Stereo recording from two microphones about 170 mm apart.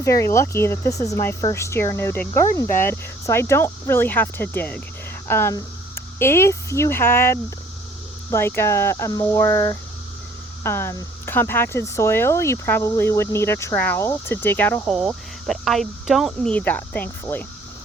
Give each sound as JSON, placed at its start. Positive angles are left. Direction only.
{"t": 0.0, "sound": "speech", "side_deg": 15}
{"t": 14.8, "sound": "speech", "side_deg": 0}